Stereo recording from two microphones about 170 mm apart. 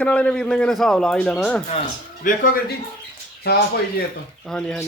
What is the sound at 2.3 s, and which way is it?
Speech, 50° left (ahead or behind).